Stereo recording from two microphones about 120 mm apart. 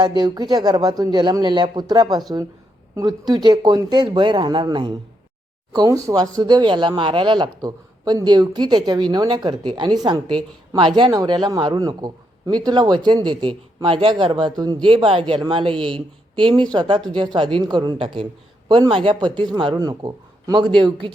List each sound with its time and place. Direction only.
0.2 s speech: 35° right (ahead or behind)
5.7 s speech: 30° right (ahead or behind)